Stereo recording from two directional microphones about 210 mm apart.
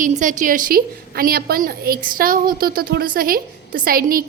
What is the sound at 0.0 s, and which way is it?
A woman's voice, 40° right (ahead or behind).